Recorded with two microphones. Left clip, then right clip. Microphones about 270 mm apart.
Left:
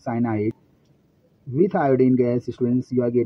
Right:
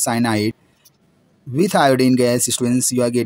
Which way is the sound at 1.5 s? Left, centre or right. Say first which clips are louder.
Right 5 dB; right.